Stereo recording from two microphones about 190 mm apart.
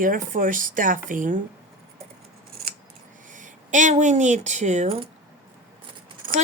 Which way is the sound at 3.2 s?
40° right (ahead or behind).